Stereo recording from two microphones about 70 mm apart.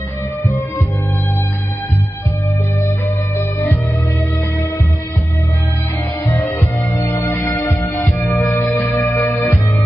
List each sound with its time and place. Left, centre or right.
3.3 s music: left
6.2 s music: left
9.0 s music: left